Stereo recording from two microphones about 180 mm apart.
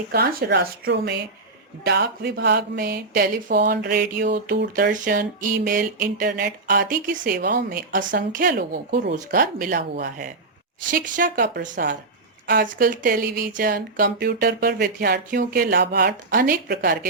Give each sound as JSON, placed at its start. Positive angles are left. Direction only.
{"t": 0.1, "sound": "a sound", "side_deg": -60}
{"t": 4.7, "sound": "speech", "side_deg": -45}
{"t": 9.1, "sound": "speech", "side_deg": -45}